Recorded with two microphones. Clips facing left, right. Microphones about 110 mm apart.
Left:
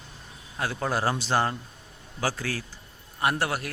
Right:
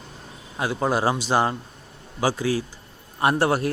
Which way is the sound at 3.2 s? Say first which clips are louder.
Right 6 dB; 30° right (ahead or behind).